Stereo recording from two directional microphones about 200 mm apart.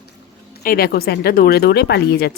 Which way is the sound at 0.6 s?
45° left (ahead or behind).